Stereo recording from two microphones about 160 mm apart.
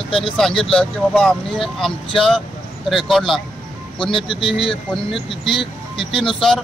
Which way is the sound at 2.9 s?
Centre (ahead or behind).